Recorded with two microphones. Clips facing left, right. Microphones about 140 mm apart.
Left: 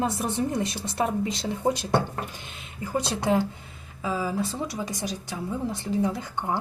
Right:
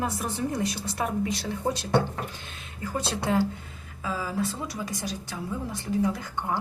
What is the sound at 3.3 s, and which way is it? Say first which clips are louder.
A woman's voice: left 1 dB; 15° left (ahead or behind).